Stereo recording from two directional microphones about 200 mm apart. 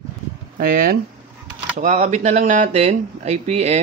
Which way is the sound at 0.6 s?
45° right (ahead or behind).